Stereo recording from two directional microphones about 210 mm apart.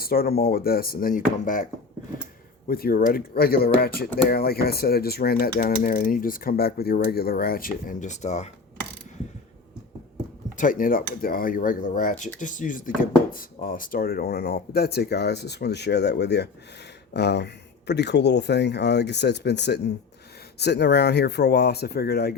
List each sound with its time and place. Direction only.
0.0 s speech: 45° left (ahead or behind)
2.6 s speech: 45° left (ahead or behind)
10.6 s speech: 40° left (ahead or behind)